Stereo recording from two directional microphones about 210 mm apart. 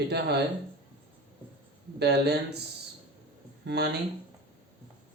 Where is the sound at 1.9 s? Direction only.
50° right (ahead or behind).